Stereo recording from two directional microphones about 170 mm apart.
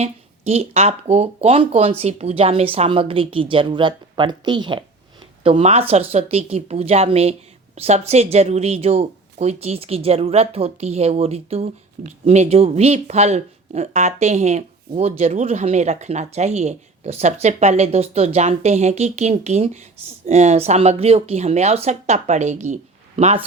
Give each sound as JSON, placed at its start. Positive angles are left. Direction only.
{"t": 0.0, "sound": "speech", "side_deg": -40}